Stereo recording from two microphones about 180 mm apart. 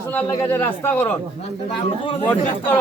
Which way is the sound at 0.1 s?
10° left (ahead or behind).